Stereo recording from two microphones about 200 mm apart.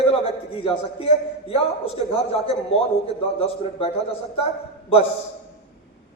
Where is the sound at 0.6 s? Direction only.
30° left (ahead or behind).